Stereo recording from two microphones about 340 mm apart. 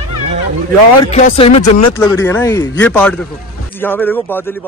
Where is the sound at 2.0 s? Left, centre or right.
Centre.